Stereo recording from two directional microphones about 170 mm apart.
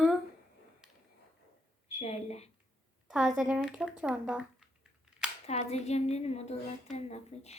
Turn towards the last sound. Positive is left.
turn(degrees=40)  # may be behind; listen again after turning